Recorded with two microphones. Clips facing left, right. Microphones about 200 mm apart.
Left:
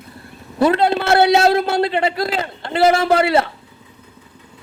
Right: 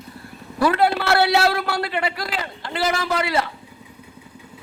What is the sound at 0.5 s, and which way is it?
A man's voice, 25° left (ahead or behind).